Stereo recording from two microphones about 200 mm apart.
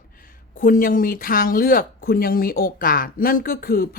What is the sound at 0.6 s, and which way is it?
A woman's voice, 45° left (ahead or behind).